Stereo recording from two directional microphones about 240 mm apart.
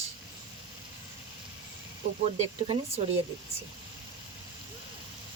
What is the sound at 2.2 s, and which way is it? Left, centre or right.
Speech, right.